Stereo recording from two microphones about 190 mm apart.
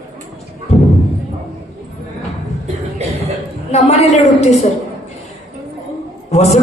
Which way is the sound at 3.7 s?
35° left (ahead or behind).